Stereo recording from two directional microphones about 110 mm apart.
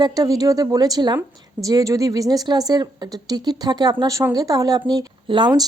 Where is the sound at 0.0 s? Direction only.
35° right (ahead or behind).